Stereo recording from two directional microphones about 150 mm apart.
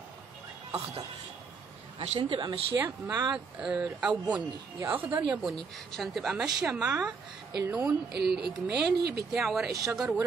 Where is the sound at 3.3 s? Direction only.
5° right (ahead or behind).